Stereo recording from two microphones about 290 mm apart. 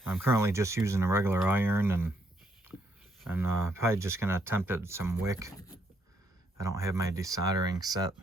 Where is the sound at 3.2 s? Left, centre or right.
Centre.